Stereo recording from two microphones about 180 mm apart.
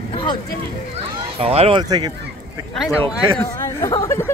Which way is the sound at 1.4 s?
35° right (ahead or behind).